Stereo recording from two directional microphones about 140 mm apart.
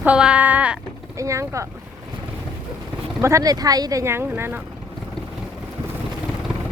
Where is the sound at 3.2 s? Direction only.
25° right (ahead or behind).